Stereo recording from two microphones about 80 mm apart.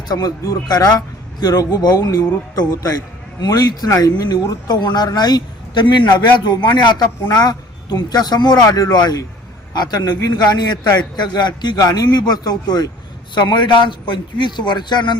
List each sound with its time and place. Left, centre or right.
0.1 s speech: left
3.4 s a man's voice: left
11.8 s a man's voice: left
13.3 s a man's voice: left